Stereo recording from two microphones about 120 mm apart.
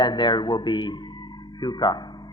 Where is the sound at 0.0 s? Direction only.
35° left (ahead or behind).